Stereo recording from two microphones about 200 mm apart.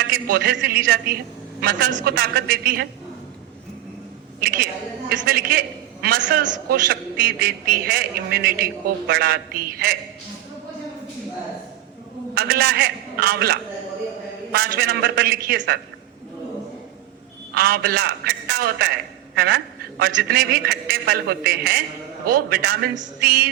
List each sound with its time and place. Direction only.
0.0 s a woman's voice: 50° right (ahead or behind)
4.4 s a woman's voice: 50° right (ahead or behind)
12.3 s a man's voice: 50° right (ahead or behind)
17.5 s a woman's voice: 50° right (ahead or behind)